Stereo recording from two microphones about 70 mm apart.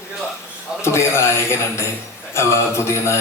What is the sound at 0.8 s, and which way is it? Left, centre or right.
A man's voice, left.